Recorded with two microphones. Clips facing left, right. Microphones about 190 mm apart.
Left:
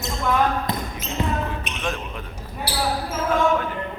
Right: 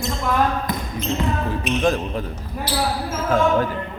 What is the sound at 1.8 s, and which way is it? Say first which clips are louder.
Speech: right 8 dB; 35° right (ahead or behind).